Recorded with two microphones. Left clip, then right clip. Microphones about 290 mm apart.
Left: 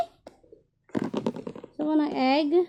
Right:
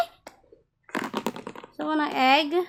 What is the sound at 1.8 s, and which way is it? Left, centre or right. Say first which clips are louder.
Speech: right 2 dB; centre.